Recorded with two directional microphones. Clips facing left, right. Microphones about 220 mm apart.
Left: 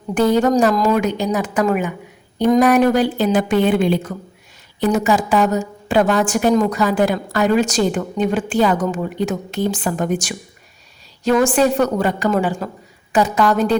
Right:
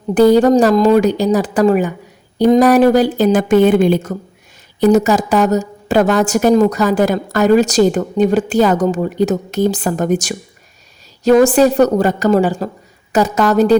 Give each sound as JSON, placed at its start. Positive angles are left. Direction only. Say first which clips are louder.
{"t": 0.1, "sound": "a woman's voice", "louder": "right 6 dB", "side_deg": -35}